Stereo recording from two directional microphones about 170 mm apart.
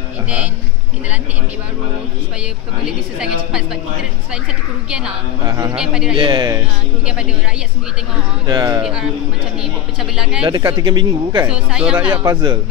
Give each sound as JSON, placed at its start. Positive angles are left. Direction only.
{"t": 2.8, "sound": "a woman's voice", "side_deg": -5}
{"t": 4.8, "sound": "a woman's voice", "side_deg": -5}
{"t": 5.5, "sound": "a man's voice", "side_deg": -20}
{"t": 5.8, "sound": "a woman's voice", "side_deg": -5}
{"t": 6.1, "sound": "a man's voice", "side_deg": -30}
{"t": 8.5, "sound": "a man's voice", "side_deg": -25}
{"t": 8.8, "sound": "a woman's voice", "side_deg": -5}
{"t": 10.1, "sound": "a woman's voice", "side_deg": -5}
{"t": 10.4, "sound": "a man's voice", "side_deg": -25}
{"t": 11.4, "sound": "speech", "side_deg": -5}
{"t": 12.3, "sound": "a man's voice", "side_deg": -25}